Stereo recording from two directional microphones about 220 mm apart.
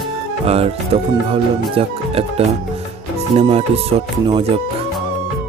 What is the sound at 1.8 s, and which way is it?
Speech, 25° right (ahead or behind).